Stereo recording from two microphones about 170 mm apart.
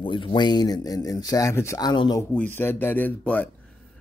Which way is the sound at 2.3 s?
10° left (ahead or behind).